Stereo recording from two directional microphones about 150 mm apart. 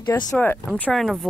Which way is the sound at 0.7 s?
5° left (ahead or behind).